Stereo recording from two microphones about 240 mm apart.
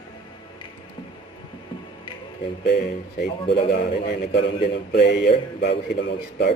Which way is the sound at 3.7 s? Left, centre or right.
Left.